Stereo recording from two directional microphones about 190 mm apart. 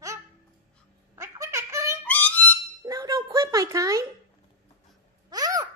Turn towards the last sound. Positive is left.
turn(degrees=-20)  # may be behind; listen again after turning